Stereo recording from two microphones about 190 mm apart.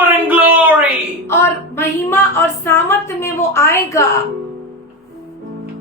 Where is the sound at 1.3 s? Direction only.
10° left (ahead or behind).